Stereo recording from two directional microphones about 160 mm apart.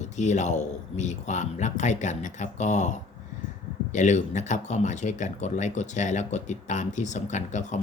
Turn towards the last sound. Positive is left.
turn(degrees=50)  # may be behind; listen again after turning